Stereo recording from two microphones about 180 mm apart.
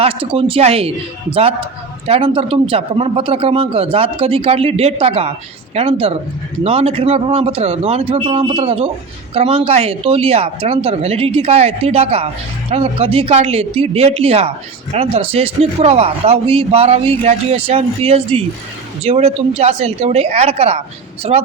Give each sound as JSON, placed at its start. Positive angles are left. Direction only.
{"t": 0.0, "sound": "speech", "side_deg": -30}